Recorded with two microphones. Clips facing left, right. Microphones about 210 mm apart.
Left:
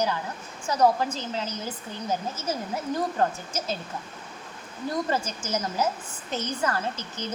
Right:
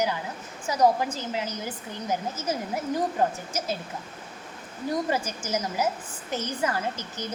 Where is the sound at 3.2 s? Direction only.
15° right (ahead or behind).